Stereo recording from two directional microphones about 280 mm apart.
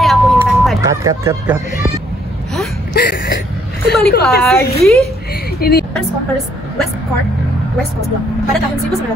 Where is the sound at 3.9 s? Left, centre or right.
Left.